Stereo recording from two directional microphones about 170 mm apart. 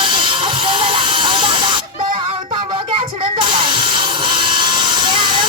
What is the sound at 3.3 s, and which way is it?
Hiss, 30° right (ahead or behind).